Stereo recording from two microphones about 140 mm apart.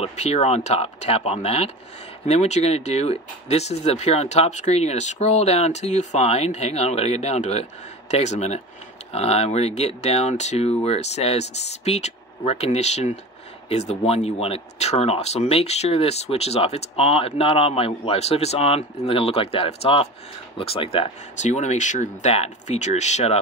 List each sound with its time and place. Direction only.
0.0 s speech: 50° left (ahead or behind)
21.4 s speech: 55° left (ahead or behind)